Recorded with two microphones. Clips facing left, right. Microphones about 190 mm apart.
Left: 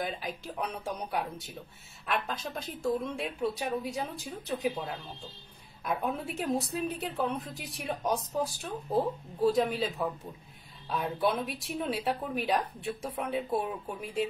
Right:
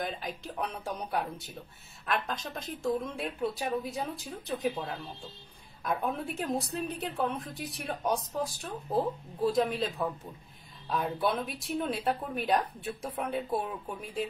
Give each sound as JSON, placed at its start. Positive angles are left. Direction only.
{"t": 0.0, "sound": "a woman's voice", "side_deg": 0}